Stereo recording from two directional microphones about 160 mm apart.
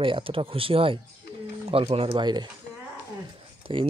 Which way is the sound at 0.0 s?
35° right (ahead or behind).